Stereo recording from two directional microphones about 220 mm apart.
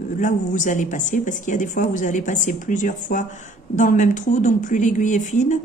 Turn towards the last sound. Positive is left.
turn(degrees=35)  # may be behind; listen again after turning